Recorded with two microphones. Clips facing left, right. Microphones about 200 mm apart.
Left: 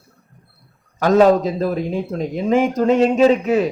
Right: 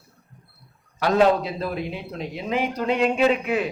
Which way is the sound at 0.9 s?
45° left (ahead or behind).